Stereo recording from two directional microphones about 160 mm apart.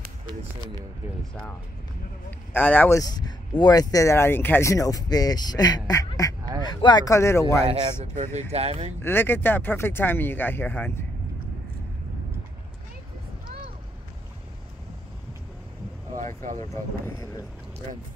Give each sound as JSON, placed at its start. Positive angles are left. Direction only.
{"t": 2.5, "sound": "speech", "side_deg": 10}
{"t": 3.0, "sound": "speech", "side_deg": 25}
{"t": 7.6, "sound": "speech", "side_deg": -40}
{"t": 9.0, "sound": "speech", "side_deg": 15}
{"t": 16.6, "sound": "speech", "side_deg": 20}